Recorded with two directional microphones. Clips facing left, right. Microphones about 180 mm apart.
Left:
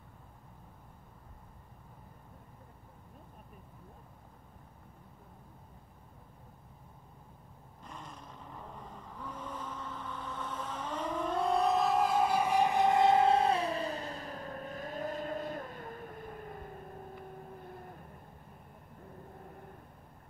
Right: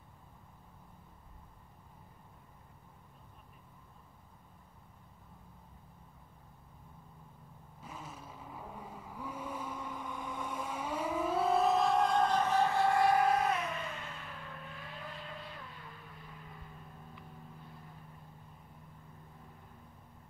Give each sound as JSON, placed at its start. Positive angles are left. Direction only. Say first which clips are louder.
{"t": 7.8, "sound": "vehicle", "louder": "right 1 dB", "side_deg": -5}
{"t": 19.3, "sound": "vehicle", "louder": "left 7 dB", "side_deg": 55}